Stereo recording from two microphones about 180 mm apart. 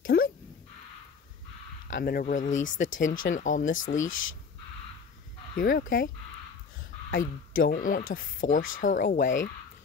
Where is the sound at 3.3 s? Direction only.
45° left (ahead or behind).